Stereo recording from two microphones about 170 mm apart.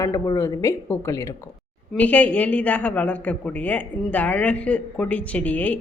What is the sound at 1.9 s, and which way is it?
Speech, 10° left (ahead or behind).